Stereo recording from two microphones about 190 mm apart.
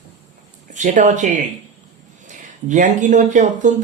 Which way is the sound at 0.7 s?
40° right (ahead or behind).